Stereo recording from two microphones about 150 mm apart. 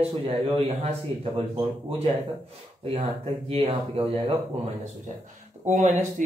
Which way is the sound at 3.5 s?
40° right (ahead or behind).